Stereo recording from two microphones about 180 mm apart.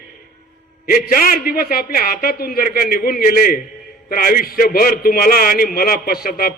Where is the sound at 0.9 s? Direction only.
55° left (ahead or behind).